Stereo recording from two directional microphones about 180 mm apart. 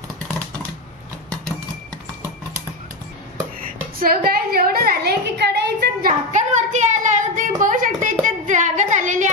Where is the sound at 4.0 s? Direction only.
55° right (ahead or behind).